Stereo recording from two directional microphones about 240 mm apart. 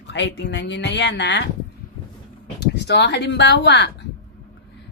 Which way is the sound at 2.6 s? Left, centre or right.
Left.